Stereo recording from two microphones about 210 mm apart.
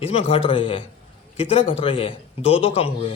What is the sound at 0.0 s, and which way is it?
A man's voice, 30° left (ahead or behind).